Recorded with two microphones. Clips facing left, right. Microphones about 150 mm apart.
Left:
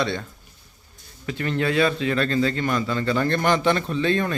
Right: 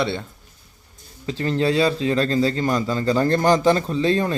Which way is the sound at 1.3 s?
30° right (ahead or behind).